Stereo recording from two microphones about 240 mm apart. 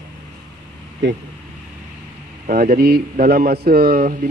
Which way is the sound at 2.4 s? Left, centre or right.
Right.